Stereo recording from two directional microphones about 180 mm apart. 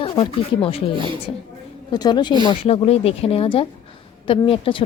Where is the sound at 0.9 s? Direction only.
25° right (ahead or behind).